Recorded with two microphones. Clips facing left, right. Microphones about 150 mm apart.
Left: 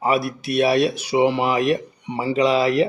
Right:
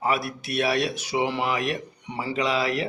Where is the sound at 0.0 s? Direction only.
20° left (ahead or behind).